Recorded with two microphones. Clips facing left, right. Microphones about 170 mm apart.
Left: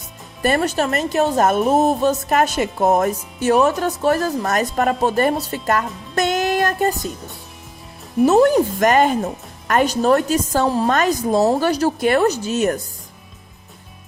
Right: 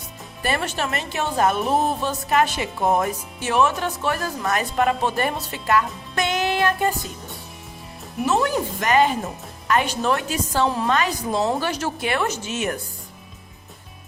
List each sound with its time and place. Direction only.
0.4 s speech: 40° left (ahead or behind)
8.2 s speech: 40° left (ahead or behind)